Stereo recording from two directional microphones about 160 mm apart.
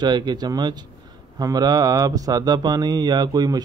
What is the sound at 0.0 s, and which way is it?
Speech, 25° right (ahead or behind).